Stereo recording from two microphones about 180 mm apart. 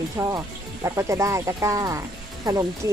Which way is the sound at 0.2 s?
20° right (ahead or behind).